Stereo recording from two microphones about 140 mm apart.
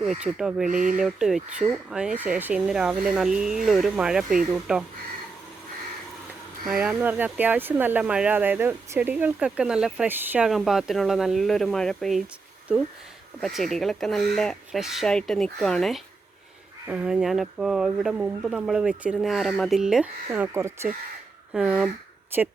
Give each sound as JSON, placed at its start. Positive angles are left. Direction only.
{"t": 0.0, "sound": "speech", "side_deg": -5}
{"t": 0.7, "sound": "speech", "side_deg": -65}
{"t": 0.9, "sound": "speech", "side_deg": -5}
{"t": 6.7, "sound": "speech", "side_deg": -5}
{"t": 10.5, "sound": "speech", "side_deg": 0}
{"t": 13.4, "sound": "speech", "side_deg": 0}
{"t": 20.3, "sound": "speech", "side_deg": -15}
{"t": 21.5, "sound": "speech", "side_deg": -5}